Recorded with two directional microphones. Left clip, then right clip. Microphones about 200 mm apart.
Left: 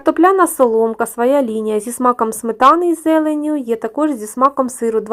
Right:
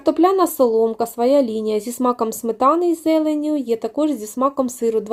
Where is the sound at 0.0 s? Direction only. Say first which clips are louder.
Left 4 dB; 5° left (ahead or behind).